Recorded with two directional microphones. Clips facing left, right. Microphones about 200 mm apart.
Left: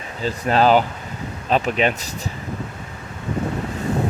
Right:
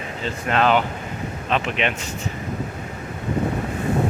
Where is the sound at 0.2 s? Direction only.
35° left (ahead or behind).